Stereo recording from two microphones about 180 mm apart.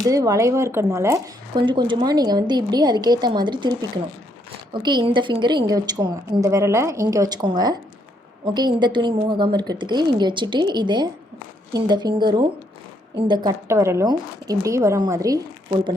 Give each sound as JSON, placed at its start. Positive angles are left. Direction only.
{"t": 0.0, "sound": "speech", "side_deg": -20}